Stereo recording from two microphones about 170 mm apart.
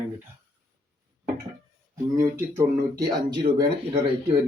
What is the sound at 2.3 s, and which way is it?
Speech, 20° right (ahead or behind).